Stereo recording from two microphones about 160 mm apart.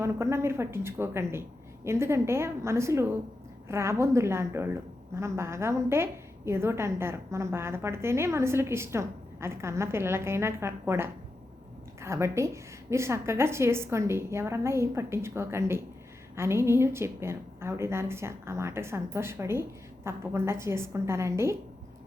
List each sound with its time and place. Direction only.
0.0 s a woman's voice: 15° right (ahead or behind)